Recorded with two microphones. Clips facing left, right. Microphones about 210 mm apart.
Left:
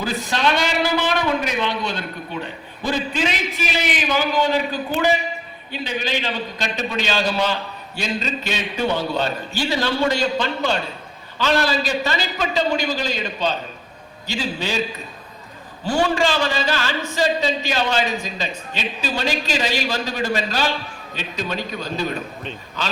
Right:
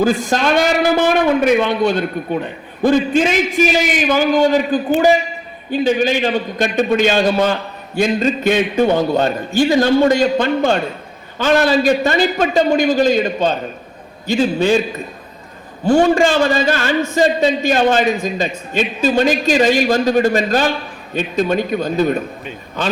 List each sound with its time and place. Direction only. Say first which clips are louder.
0.0 s a man's voice: right 7 dB; 50° right (ahead or behind)
15.8 s a man's voice: right 8 dB; 50° right (ahead or behind)